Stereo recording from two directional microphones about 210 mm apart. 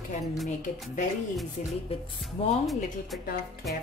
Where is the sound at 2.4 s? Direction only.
25° left (ahead or behind).